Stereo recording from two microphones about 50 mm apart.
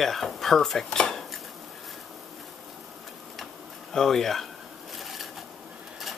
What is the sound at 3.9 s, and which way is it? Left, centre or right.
Speech, centre.